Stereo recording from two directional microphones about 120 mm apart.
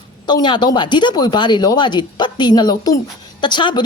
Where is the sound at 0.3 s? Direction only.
40° left (ahead or behind).